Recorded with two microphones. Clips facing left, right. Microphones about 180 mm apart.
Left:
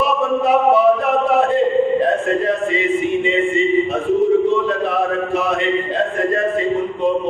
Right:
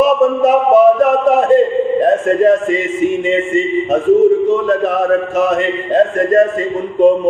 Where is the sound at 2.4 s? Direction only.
45° right (ahead or behind).